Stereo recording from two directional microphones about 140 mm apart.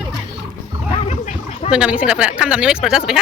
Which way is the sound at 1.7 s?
5° right (ahead or behind).